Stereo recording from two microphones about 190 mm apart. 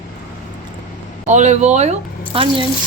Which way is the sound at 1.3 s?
35° right (ahead or behind).